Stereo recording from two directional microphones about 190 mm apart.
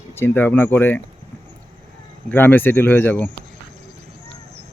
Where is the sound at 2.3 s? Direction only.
10° left (ahead or behind).